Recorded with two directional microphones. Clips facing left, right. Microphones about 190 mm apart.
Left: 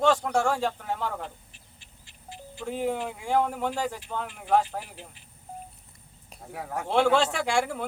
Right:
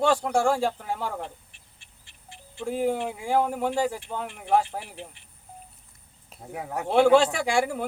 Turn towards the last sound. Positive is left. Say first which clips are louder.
# right 2 dB
turn(degrees=-10)  # may be behind; listen again after turning